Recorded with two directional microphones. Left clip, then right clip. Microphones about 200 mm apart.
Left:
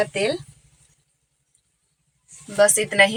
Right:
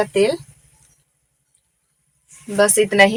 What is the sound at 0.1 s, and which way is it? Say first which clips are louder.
Speech: right 6 dB; 45° right (ahead or behind).